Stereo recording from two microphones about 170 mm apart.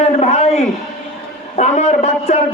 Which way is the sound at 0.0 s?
40° left (ahead or behind).